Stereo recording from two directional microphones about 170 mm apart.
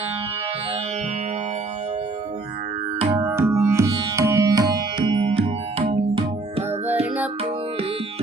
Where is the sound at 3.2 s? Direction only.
15° right (ahead or behind).